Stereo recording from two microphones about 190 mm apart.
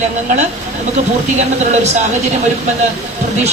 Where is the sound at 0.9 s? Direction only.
35° right (ahead or behind).